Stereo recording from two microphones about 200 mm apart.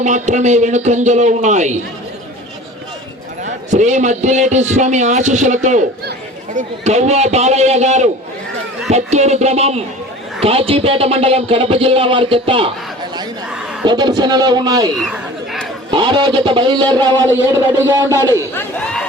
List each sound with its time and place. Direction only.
0.0 s a man's voice: 35° right (ahead or behind)
3.4 s a man's voice: 35° right (ahead or behind)
13.8 s speech: 20° right (ahead or behind)
14.9 s chatter: centre (ahead or behind)
15.9 s speech: 25° right (ahead or behind)
18.5 s speech: 5° left (ahead or behind)